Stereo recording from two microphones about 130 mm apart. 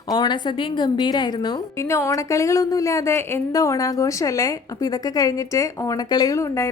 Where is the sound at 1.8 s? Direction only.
20° left (ahead or behind).